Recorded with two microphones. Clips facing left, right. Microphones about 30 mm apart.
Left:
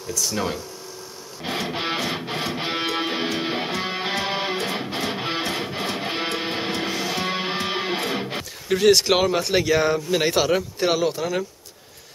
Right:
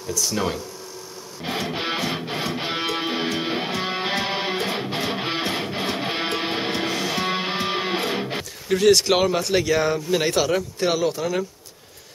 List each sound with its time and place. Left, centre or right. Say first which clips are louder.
0.1 s speech: right 1 dB; centre
1.4 s music: even; centre
8.6 s speech: even; centre